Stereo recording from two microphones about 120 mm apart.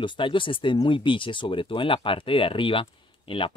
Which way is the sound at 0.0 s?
40° left (ahead or behind).